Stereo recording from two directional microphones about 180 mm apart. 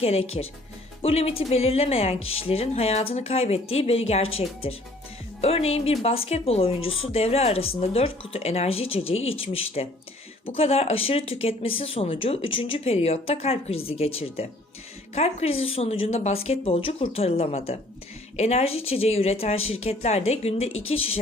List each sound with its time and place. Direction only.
0.0 s a woman's voice: 35° left (ahead or behind)
5.4 s a woman's voice: 35° left (ahead or behind)
9.1 s speech: 90° left
9.8 s a woman's voice: 35° left (ahead or behind)